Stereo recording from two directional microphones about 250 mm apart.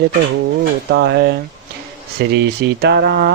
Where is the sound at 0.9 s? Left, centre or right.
Right.